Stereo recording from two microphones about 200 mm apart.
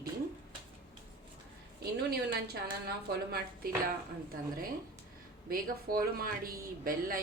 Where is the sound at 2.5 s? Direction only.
50° right (ahead or behind).